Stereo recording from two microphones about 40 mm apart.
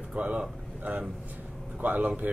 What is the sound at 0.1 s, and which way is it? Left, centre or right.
Speech, right.